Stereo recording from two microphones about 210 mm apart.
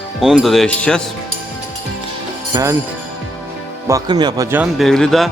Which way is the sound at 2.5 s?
20° right (ahead or behind).